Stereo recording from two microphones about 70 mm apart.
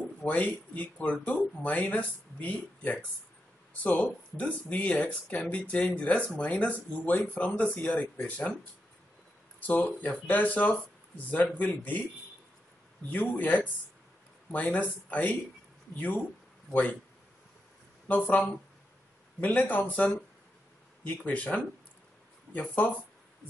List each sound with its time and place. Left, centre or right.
0.2 s speech: centre
9.6 s speech: left
13.1 s speech: left
18.0 s speech: left
19.4 s speech: left